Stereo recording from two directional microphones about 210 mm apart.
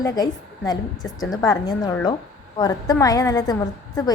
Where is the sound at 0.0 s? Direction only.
15° left (ahead or behind).